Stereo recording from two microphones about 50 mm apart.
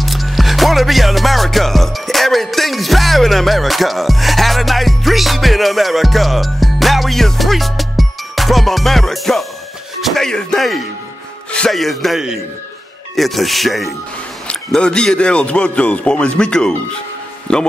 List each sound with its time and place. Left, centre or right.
0.0 s music: centre
10.1 s speech: centre
11.7 s music: centre
14.8 s a man's voice: centre